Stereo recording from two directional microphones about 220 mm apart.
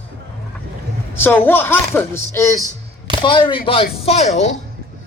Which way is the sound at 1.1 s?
10° left (ahead or behind).